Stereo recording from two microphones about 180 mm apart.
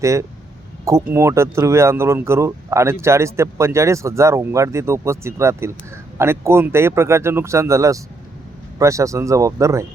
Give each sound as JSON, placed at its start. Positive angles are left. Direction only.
{"t": 0.0, "sound": "speech", "side_deg": -15}